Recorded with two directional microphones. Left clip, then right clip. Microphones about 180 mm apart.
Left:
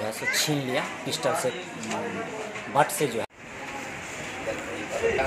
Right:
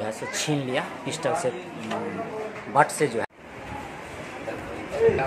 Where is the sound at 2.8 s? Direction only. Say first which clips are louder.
Right 3 dB; 10° right (ahead or behind).